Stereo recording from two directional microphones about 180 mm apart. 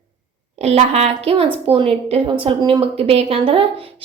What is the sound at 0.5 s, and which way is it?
A woman's voice, 35° right (ahead or behind).